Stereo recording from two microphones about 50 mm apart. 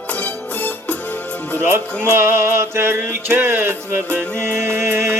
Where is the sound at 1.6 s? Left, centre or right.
Right.